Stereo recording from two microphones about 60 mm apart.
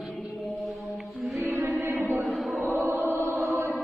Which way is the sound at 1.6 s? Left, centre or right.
Right.